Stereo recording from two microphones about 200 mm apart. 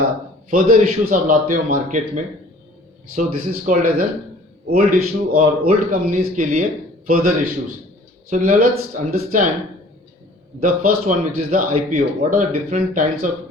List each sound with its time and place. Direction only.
0.5 s a man's voice: 45° right (ahead or behind)
10.6 s a man's voice: 45° right (ahead or behind)